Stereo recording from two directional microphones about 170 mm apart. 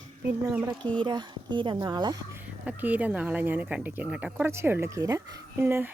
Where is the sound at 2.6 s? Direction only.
10° right (ahead or behind).